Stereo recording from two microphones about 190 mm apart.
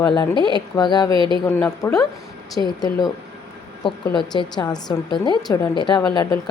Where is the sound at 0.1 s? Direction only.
25° left (ahead or behind).